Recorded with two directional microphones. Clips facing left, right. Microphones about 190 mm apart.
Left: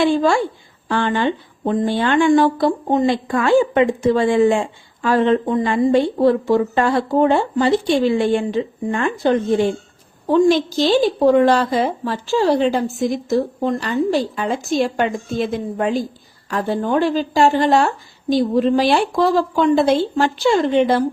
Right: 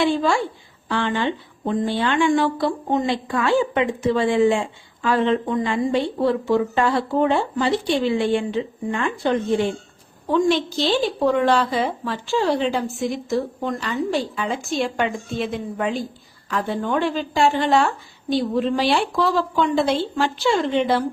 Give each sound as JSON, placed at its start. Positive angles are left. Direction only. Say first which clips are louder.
{"t": 0.0, "sound": "a woman's voice", "louder": "left 4 dB", "side_deg": 45}